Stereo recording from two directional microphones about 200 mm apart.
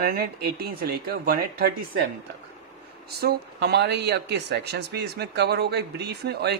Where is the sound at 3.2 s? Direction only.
50° right (ahead or behind).